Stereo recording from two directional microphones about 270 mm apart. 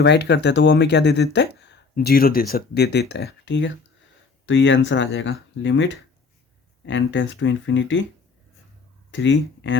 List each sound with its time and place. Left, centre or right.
0.0 s speech: left
9.1 s speech: left